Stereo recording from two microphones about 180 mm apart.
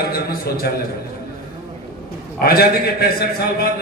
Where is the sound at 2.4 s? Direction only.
60° left (ahead or behind).